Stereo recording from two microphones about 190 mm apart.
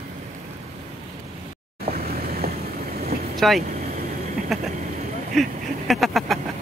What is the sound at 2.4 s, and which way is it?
Vehicle, 55° right (ahead or behind).